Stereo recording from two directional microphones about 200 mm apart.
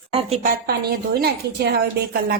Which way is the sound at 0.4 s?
50° right (ahead or behind).